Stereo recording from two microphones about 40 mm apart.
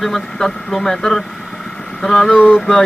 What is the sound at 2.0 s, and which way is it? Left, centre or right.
Vehicle, centre.